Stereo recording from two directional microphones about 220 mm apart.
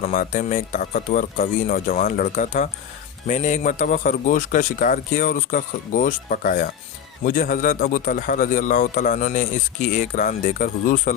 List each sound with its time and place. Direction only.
0.0 s a man's voice: 35° left (ahead or behind)